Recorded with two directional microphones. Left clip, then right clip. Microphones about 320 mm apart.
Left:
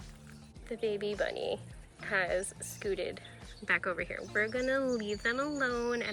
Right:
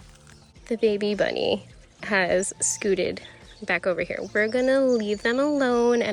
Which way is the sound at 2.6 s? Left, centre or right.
Centre.